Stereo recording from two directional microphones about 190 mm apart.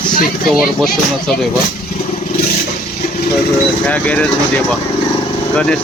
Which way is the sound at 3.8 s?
5° left (ahead or behind).